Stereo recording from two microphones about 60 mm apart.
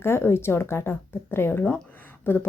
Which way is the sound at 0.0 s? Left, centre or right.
Left.